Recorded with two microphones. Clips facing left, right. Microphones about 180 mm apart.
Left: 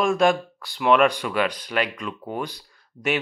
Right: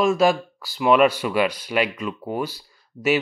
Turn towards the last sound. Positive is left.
turn(degrees=-5)  # may be behind; listen again after turning